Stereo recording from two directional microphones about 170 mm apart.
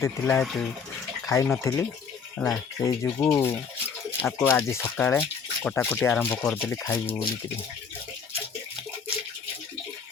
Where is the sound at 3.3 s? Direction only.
15° left (ahead or behind).